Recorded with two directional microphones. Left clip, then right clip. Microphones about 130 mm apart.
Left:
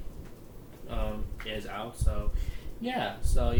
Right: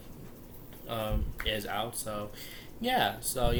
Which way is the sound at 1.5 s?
15° right (ahead or behind).